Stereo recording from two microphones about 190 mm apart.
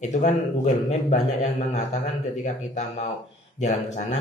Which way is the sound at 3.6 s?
40° left (ahead or behind).